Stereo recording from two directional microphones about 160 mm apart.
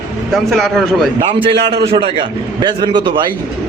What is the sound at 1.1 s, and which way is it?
A man's voice, 35° right (ahead or behind).